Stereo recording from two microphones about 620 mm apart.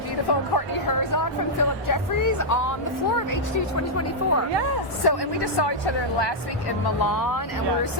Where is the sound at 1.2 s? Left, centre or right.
Left.